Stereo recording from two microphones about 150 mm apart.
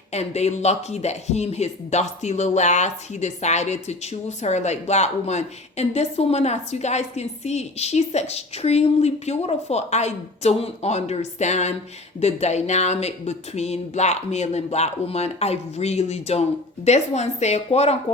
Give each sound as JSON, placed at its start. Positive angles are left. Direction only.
{"t": 0.1, "sound": "speech", "side_deg": 45}